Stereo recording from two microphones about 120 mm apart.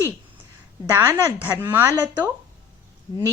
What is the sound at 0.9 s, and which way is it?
A woman's voice, 15° right (ahead or behind).